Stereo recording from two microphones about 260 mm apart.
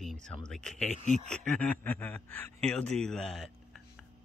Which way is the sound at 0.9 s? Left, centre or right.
Right.